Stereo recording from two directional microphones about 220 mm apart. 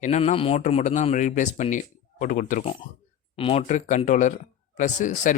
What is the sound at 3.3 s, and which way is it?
Speech, 25° left (ahead or behind).